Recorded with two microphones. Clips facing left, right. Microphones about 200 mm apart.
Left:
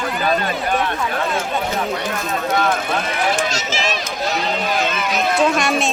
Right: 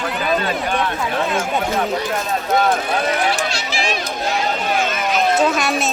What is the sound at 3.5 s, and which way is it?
Run, 40° left (ahead or behind).